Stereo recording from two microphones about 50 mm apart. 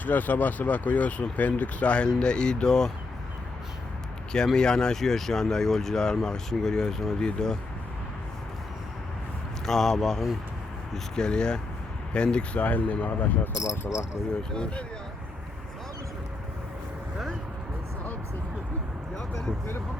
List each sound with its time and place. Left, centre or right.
0.0 s speech: left; by 2.9 s centre
4.5 s speech: centre
9.6 s speech: centre
12.6 s speech: left
14.5 s speech: centre